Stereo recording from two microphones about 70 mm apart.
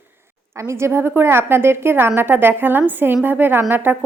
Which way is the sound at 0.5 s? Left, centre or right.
Right.